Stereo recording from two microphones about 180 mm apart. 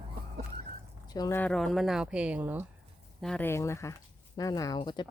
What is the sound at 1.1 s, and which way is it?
Speech, 20° left (ahead or behind).